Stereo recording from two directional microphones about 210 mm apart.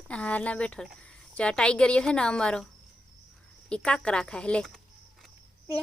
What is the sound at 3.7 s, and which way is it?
Speech, 5° left (ahead or behind).